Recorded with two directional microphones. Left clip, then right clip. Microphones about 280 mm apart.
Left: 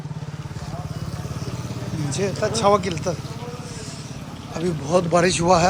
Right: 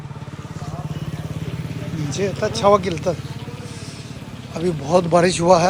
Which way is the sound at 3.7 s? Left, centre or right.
Left.